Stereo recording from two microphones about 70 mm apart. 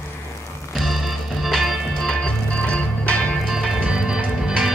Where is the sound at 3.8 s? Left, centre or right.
Centre.